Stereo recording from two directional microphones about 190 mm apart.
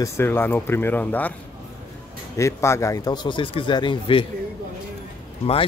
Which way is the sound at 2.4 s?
15° left (ahead or behind).